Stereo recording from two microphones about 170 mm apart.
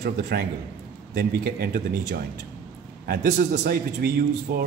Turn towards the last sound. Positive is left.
turn(degrees=-65)  # may be behind; listen again after turning